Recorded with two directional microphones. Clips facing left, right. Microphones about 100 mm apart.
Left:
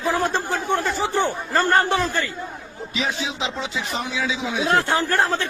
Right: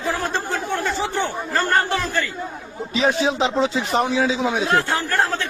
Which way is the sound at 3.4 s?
35° right (ahead or behind).